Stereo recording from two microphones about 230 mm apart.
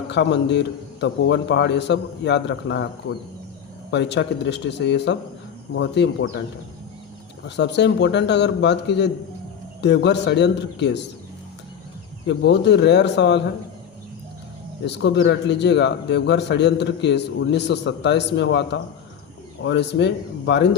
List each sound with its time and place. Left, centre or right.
0.1 s a man's voice: left
7.4 s a man's voice: left
12.3 s a man's voice: left
14.8 s a man's voice: left